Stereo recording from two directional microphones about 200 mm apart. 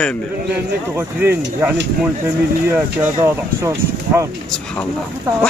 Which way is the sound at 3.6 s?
15° right (ahead or behind).